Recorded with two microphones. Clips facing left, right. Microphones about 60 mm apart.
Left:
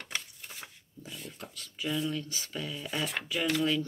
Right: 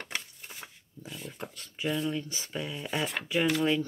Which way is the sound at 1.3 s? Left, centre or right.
Right.